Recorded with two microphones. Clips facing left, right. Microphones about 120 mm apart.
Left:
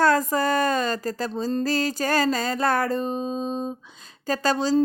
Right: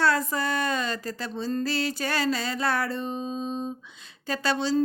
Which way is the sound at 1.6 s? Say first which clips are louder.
Left 5 dB; 40° left (ahead or behind).